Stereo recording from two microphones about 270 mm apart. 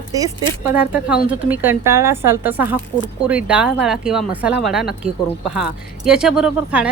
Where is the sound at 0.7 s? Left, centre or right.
Centre.